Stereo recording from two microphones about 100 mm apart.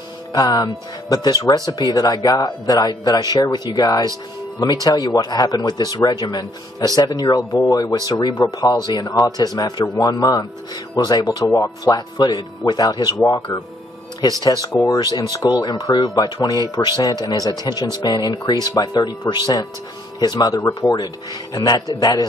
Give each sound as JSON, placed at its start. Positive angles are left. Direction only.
{"t": 0.3, "sound": "speech", "side_deg": 40}
{"t": 14.4, "sound": "speech", "side_deg": 40}